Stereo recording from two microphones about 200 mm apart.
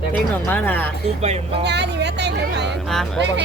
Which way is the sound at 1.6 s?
60° right (ahead or behind).